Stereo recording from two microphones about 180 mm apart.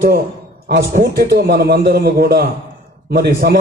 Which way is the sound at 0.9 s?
55° right (ahead or behind).